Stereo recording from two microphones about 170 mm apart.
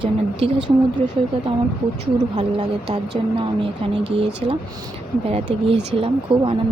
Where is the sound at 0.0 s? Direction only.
30° right (ahead or behind).